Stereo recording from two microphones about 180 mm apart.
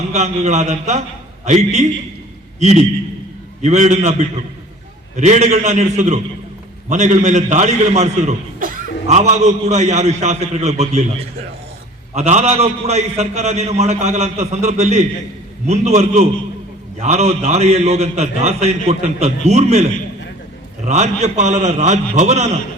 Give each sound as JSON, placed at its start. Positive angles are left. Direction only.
{"t": 0.1, "sound": "a man's voice", "side_deg": -40}
{"t": 12.1, "sound": "a man's voice", "side_deg": -40}